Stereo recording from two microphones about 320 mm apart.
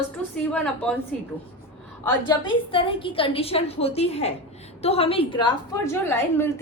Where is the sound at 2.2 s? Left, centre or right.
Centre.